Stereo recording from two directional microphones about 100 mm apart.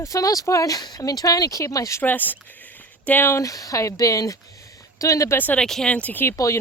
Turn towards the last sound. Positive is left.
turn(degrees=30)  # may be behind; listen again after turning